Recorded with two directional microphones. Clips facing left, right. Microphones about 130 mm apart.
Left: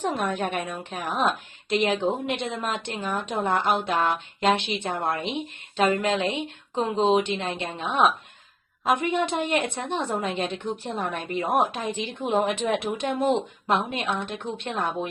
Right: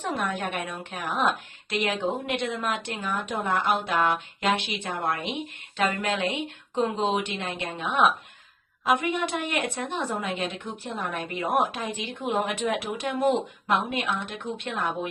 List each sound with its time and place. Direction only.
0.0 s a woman's voice: 25° left (ahead or behind)
11.9 s a woman's voice: 15° right (ahead or behind)
12.3 s a woman's voice: 25° left (ahead or behind)
14.1 s speech: 40° left (ahead or behind)
14.3 s a woman's voice: 25° left (ahead or behind)